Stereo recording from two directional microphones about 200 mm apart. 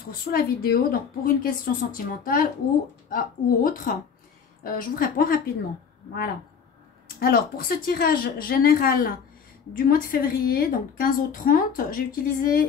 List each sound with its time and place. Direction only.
0.3 s a woman's voice: 50° left (ahead or behind)
7.2 s a woman's voice: 45° left (ahead or behind)